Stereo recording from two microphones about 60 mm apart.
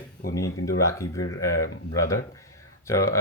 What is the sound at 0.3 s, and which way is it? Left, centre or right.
Speech, left.